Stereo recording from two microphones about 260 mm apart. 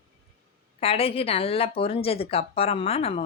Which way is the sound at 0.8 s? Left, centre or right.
Left.